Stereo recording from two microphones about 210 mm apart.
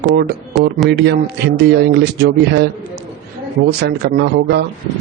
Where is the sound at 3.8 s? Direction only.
50° right (ahead or behind).